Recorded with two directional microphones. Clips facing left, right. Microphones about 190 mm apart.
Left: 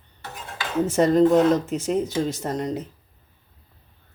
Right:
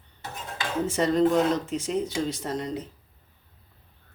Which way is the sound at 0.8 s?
45° left (ahead or behind).